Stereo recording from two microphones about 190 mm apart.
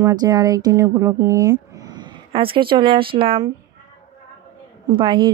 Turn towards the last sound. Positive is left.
turn(degrees=-25)  # may be behind; listen again after turning